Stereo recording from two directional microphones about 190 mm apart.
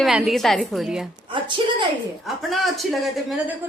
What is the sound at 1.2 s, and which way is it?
Speech, 25° right (ahead or behind).